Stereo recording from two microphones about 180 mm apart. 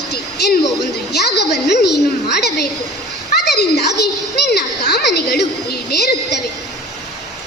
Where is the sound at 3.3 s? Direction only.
65° left (ahead or behind).